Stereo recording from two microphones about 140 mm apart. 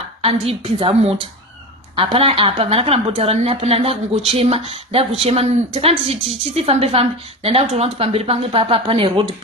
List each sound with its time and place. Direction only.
0.2 s a woman's voice: 45° right (ahead or behind)
2.1 s a woman's voice: 40° right (ahead or behind)